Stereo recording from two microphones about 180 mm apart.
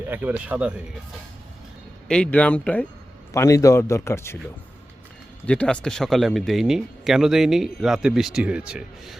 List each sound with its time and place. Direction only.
0.1 s speech: 10° right (ahead or behind)
2.0 s speech: 5° left (ahead or behind)
5.5 s speech: 5° left (ahead or behind)